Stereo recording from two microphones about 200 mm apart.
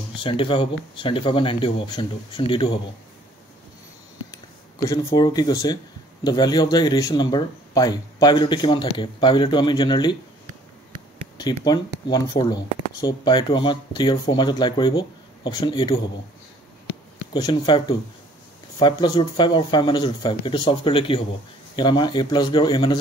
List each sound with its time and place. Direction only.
0.2 s speech: 25° left (ahead or behind)
4.8 s speech: 20° left (ahead or behind)
11.6 s speech: 20° left (ahead or behind)
17.3 s speech: 20° left (ahead or behind)